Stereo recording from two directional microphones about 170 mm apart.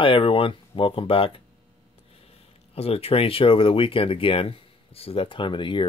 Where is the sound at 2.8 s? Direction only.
35° left (ahead or behind).